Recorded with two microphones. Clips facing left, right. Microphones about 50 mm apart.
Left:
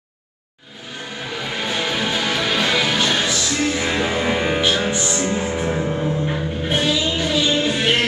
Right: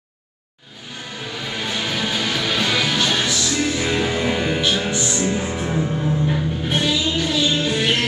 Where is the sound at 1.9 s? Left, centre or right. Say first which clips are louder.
Left 1 dB; centre.